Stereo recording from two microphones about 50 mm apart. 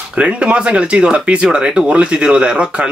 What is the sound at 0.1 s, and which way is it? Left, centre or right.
Speech, right.